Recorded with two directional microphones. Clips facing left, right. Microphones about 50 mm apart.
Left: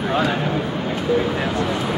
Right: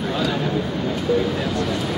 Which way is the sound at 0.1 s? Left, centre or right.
Left.